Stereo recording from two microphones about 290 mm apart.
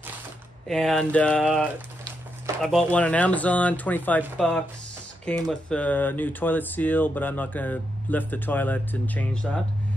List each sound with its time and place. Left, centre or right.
0.7 s speech: centre